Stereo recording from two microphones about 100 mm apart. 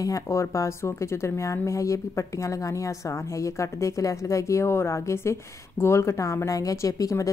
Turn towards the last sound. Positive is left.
turn(degrees=35)  # may be behind; listen again after turning